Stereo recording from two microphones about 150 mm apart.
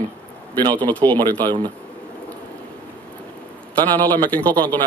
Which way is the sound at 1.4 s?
30° right (ahead or behind).